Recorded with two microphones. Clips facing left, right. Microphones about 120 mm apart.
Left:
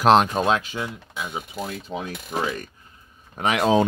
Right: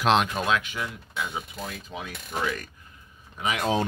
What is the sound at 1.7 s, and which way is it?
Speech, 35° left (ahead or behind).